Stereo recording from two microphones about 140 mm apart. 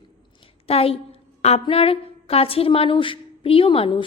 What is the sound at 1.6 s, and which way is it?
A woman's voice, 40° left (ahead or behind).